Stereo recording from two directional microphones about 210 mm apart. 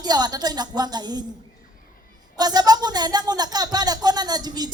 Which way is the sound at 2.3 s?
20° right (ahead or behind).